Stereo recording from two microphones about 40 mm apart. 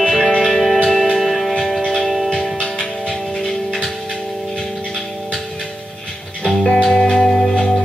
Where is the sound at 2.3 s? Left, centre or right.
Left.